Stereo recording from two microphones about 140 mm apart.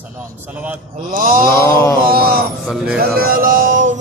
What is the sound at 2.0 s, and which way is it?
Speech, 90° right.